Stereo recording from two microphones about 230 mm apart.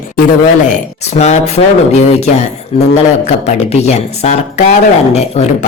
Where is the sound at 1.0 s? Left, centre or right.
Left.